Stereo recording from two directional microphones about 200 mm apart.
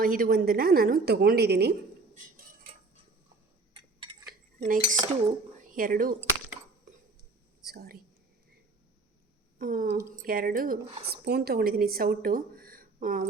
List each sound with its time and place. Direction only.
0.0 s a woman's voice: 45° right (ahead or behind)
4.3 s cutlery: 40° right (ahead or behind)
5.5 s speech: 40° right (ahead or behind)
7.7 s a woman's voice: 50° right (ahead or behind)
9.6 s a woman's voice: 45° right (ahead or behind)